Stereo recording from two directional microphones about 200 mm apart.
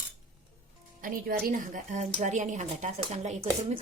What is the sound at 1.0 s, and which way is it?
A woman's voice, 45° right (ahead or behind).